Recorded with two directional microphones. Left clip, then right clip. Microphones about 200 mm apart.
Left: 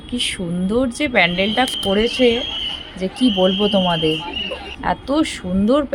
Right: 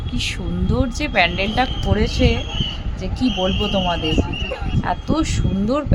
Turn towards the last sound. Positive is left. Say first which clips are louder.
# left 4 dB
turn(degrees=15)  # may be behind; listen again after turning